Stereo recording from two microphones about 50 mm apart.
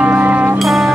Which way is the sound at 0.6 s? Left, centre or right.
Centre.